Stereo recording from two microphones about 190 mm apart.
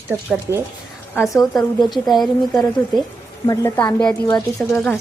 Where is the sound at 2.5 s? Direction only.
Centre (ahead or behind).